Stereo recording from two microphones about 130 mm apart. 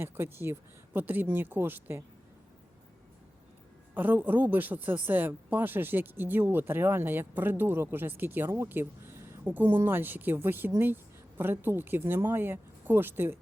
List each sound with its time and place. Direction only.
0.0 s speech: 20° right (ahead or behind)
3.9 s speech: 15° right (ahead or behind)